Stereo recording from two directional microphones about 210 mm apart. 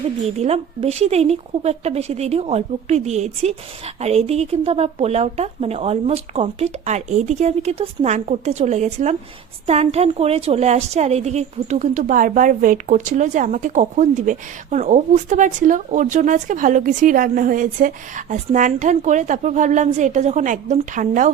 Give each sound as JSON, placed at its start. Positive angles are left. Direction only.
{"t": 0.3, "sound": "a woman's voice", "side_deg": -30}